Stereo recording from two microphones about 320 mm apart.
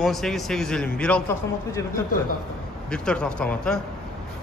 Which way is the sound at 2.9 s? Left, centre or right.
Centre.